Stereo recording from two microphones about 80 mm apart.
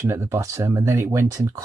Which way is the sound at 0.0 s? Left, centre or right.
Right.